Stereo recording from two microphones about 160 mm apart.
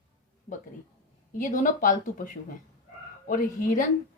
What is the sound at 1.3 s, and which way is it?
A woman's voice, 55° left (ahead or behind).